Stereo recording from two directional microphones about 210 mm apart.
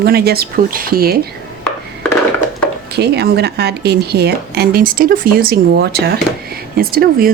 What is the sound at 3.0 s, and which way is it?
Speech, 50° right (ahead or behind).